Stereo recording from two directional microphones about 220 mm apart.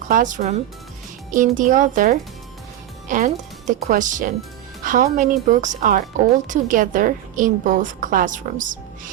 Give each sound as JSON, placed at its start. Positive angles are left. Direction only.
{"t": 0.1, "sound": "speech", "side_deg": -35}